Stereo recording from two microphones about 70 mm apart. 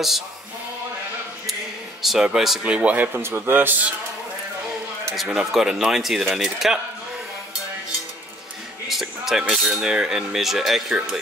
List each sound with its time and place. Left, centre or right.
1.5 s a sound: centre
2.6 s cutlery: centre
3.1 s a man's voice: right
5.1 s speech: centre
8.8 s cutlery: centre